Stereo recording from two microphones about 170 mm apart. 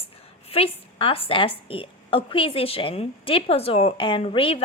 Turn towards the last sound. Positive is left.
turn(degrees=30)  # may be behind; listen again after turning